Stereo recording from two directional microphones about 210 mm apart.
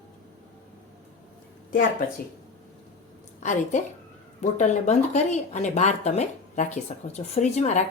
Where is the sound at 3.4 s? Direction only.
35° left (ahead or behind).